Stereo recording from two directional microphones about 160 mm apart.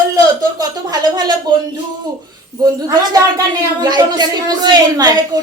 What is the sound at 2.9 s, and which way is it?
A woman's voice, 25° right (ahead or behind).